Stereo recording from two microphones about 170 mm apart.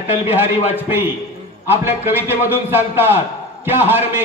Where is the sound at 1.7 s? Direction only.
10° right (ahead or behind).